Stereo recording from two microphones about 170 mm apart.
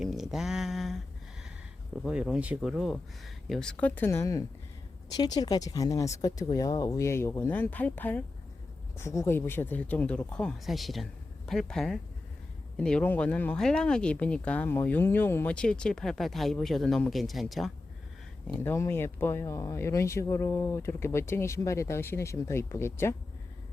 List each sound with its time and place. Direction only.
0.0 s a sound: centre (ahead or behind)
2.0 s speech: 5° right (ahead or behind)
18.4 s speech: 15° left (ahead or behind)